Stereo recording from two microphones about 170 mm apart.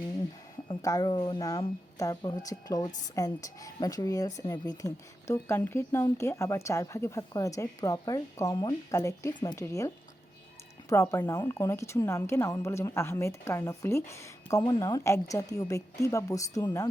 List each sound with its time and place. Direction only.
0.7 s a woman's voice: 20° left (ahead or behind)